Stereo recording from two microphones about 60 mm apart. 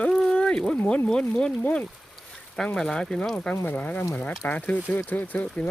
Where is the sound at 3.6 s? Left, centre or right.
Left.